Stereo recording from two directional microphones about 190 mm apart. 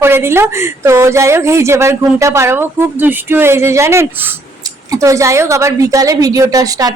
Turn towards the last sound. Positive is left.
turn(degrees=-20)  # may be behind; listen again after turning